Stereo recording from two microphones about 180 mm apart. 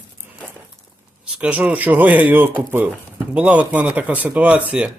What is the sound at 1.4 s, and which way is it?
Speech, 10° right (ahead or behind).